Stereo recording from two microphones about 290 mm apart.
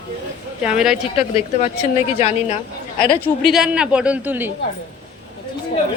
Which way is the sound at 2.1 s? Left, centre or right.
Left.